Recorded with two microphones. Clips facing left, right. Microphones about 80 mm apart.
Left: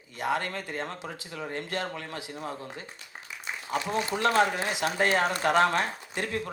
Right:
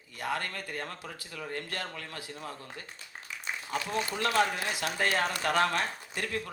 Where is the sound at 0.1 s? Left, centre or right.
Left.